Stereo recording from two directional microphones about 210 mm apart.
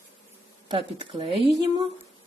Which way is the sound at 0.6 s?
25° right (ahead or behind).